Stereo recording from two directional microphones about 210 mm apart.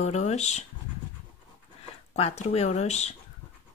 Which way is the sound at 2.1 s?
30° left (ahead or behind).